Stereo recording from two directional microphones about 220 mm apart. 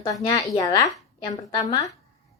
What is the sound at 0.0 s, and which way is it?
A woman's voice, 15° left (ahead or behind).